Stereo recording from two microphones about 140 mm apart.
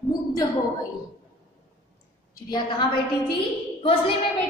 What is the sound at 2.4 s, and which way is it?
Speech, 30° left (ahead or behind).